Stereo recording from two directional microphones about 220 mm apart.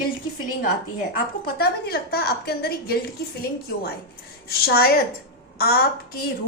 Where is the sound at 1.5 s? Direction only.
45° left (ahead or behind).